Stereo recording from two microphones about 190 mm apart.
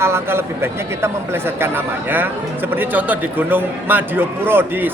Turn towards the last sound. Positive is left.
turn(degrees=-10)  # may be behind; listen again after turning